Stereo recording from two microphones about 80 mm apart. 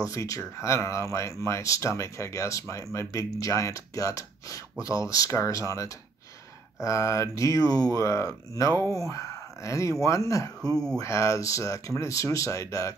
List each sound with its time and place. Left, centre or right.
0.0 s speech: left